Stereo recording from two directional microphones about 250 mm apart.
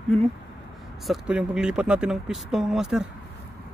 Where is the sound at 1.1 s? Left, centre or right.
Centre.